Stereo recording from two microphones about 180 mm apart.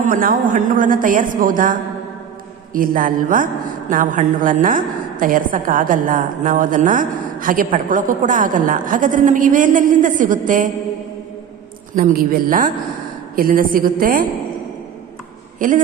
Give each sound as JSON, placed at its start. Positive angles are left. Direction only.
{"t": 0.0, "sound": "a woman's voice", "side_deg": -50}
{"t": 11.9, "sound": "a woman's voice", "side_deg": -55}
{"t": 15.6, "sound": "a woman's voice", "side_deg": -50}